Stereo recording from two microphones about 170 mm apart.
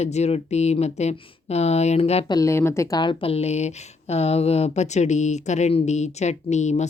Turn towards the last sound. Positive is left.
turn(degrees=45)  # may be behind; listen again after turning